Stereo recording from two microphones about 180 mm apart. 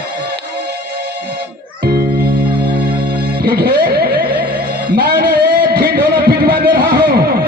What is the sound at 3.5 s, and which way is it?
Music, 60° right (ahead or behind).